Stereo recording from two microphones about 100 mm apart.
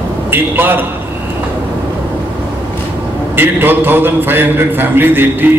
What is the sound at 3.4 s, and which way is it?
A man's voice, 20° right (ahead or behind).